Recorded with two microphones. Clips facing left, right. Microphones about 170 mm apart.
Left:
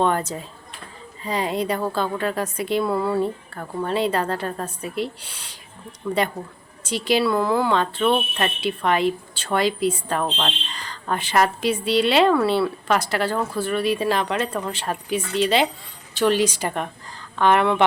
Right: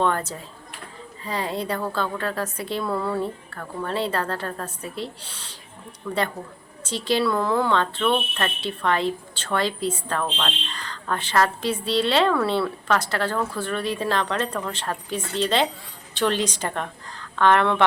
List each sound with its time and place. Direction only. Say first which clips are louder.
0.0 s a woman's voice: left 2 dB; 15° left (ahead or behind)